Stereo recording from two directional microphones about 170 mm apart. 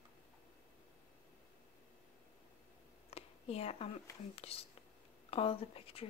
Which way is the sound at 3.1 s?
35° left (ahead or behind).